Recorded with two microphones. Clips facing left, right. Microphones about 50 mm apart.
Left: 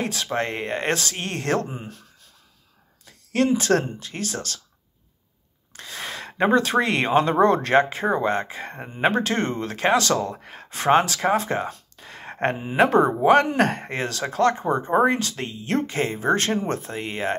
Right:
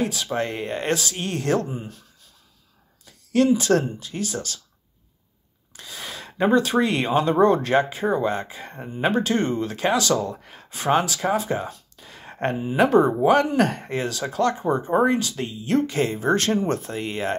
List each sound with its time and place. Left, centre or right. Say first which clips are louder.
0.0 s speech: right 1 dB; left
3.1 s speech: right 2 dB; left
5.7 s speech: left 3 dB; left
15.9 s speech: right 1 dB; left